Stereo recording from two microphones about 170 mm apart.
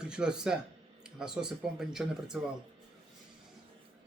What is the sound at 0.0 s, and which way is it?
Speech, 5° right (ahead or behind).